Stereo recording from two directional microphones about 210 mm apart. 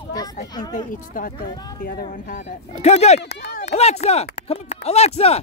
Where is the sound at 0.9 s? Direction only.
40° left (ahead or behind).